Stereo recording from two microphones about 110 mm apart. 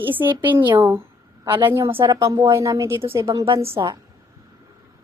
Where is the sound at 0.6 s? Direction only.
45° right (ahead or behind).